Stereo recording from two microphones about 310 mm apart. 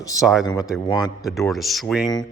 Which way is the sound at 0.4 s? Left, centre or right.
Centre.